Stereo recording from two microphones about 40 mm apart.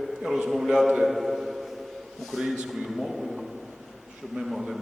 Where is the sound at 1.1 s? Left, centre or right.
Centre.